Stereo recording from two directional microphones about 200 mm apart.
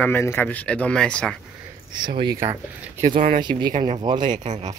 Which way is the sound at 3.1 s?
40° right (ahead or behind).